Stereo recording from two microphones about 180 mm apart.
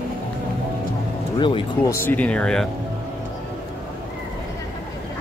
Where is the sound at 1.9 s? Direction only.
10° left (ahead or behind).